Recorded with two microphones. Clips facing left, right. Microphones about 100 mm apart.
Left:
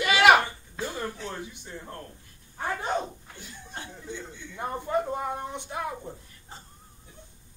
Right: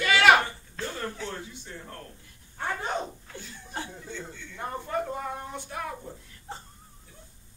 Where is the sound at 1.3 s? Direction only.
20° left (ahead or behind).